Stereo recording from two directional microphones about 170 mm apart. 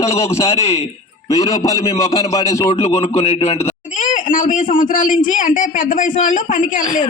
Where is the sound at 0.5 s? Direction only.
35° left (ahead or behind).